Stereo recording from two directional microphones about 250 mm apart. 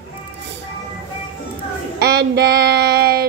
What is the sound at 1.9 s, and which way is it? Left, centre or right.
A woman's voice, right.